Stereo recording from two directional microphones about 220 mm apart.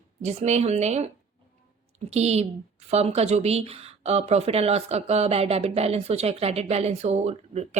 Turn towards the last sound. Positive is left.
turn(degrees=-30)  # may be behind; listen again after turning